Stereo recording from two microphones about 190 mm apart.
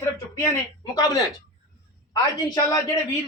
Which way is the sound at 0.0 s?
10° left (ahead or behind).